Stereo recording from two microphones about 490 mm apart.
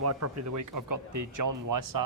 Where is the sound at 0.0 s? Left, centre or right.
Right.